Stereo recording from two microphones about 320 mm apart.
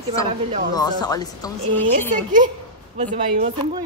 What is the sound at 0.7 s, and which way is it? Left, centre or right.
Speech, centre.